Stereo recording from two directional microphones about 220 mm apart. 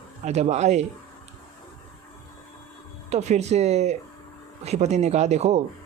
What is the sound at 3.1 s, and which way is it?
Speech, 30° right (ahead or behind).